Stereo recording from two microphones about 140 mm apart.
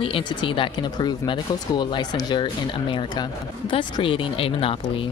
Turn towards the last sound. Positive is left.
turn(degrees=40)  # may be behind; listen again after turning